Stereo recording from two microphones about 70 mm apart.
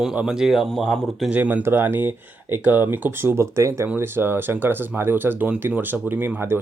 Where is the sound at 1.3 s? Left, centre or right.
Right.